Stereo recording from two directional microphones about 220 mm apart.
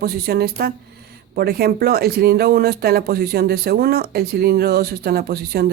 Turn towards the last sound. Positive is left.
turn(degrees=-45)  # may be behind; listen again after turning